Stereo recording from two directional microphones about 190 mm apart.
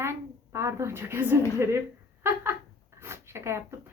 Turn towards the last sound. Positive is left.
turn(degrees=-15)  # may be behind; listen again after turning